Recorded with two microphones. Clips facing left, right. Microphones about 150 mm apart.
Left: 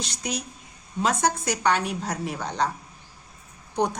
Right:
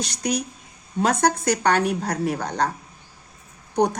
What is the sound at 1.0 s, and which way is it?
Speech, 55° right (ahead or behind).